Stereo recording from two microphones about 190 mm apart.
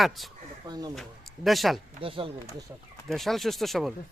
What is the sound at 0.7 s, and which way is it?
Speech, 20° right (ahead or behind).